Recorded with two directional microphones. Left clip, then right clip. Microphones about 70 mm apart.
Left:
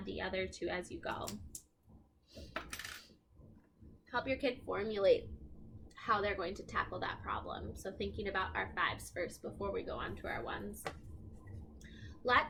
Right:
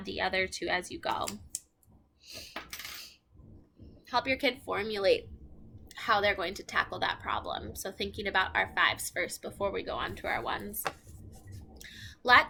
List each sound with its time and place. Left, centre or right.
0.0 s a woman's voice: right
4.1 s a woman's voice: right
11.8 s a sound: right